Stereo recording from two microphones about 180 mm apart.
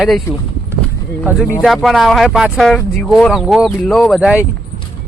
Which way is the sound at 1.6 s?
Centre (ahead or behind).